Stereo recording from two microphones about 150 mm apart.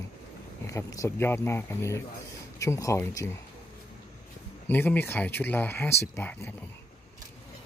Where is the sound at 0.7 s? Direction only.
20° left (ahead or behind).